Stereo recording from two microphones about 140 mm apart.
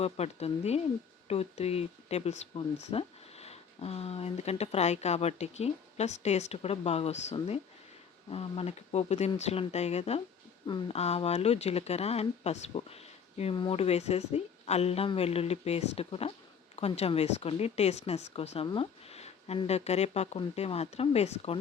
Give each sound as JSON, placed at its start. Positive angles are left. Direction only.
{"t": 0.0, "sound": "speech", "side_deg": 50}